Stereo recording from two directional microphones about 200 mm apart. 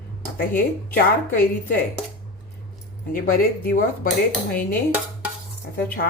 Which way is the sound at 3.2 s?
45° left (ahead or behind).